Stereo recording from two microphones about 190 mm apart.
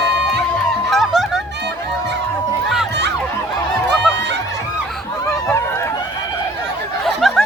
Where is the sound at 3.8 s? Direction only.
65° right (ahead or behind).